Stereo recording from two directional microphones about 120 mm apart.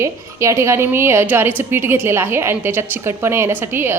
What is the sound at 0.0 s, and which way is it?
A woman's voice, 25° right (ahead or behind).